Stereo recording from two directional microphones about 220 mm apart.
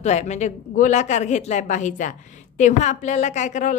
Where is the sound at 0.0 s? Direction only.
30° left (ahead or behind).